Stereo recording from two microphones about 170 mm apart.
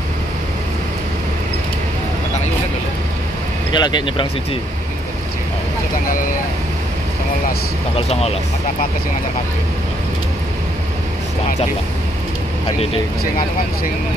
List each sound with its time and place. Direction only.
3.7 s speech: 25° left (ahead or behind)
8.1 s speech: 35° left (ahead or behind)